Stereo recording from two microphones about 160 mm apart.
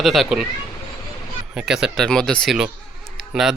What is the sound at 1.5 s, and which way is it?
Speech, 5° right (ahead or behind).